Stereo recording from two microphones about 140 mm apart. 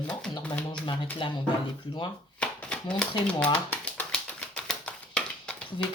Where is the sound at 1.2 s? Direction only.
35° left (ahead or behind).